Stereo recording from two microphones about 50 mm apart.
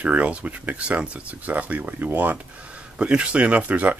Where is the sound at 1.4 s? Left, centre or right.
Right.